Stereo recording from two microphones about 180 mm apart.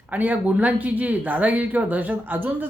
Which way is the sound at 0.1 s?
10° right (ahead or behind).